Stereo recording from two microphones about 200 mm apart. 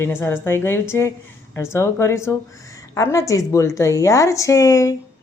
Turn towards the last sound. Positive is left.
turn(degrees=15)  # may be behind; listen again after turning